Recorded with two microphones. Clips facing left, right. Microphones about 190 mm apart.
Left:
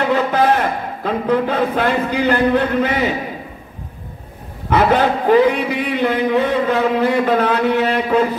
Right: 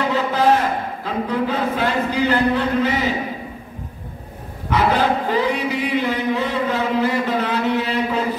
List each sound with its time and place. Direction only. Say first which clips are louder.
0.1 s a sound: left 4 dB; 55° left (ahead or behind)
1.0 s a man's voice: left 6 dB; 60° left (ahead or behind)
4.6 s a man's voice: left 3 dB; 55° left (ahead or behind)